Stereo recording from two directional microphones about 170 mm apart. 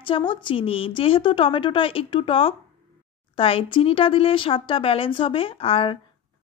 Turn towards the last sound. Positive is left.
turn(degrees=30)  # may be behind; listen again after turning